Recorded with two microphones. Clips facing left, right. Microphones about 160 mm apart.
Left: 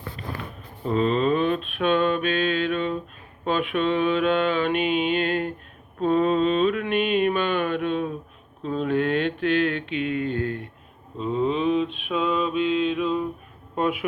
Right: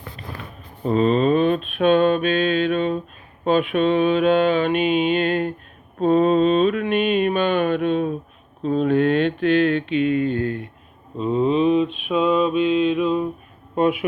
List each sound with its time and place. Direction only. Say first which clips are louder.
0.9 s mantra: right 4 dB; 20° right (ahead or behind)